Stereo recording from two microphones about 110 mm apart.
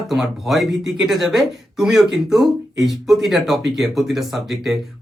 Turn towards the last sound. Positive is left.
turn(degrees=0)  # may be behind; listen again after turning